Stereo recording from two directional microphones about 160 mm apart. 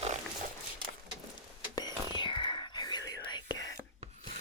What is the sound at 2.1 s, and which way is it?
Whispering, 30° left (ahead or behind).